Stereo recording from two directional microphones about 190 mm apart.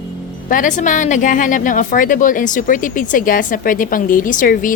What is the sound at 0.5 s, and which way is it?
Speech, 45° left (ahead or behind).